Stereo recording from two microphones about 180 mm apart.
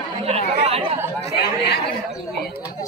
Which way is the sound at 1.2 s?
65° left (ahead or behind).